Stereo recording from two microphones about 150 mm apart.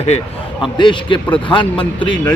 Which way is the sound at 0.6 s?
35° left (ahead or behind).